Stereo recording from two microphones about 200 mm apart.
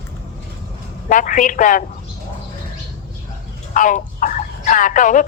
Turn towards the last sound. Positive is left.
turn(degrees=40)  # may be behind; listen again after turning